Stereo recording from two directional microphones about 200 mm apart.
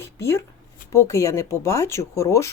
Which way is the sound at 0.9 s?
15° left (ahead or behind).